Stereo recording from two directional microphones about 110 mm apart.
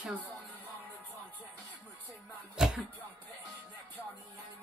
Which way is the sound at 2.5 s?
5° right (ahead or behind).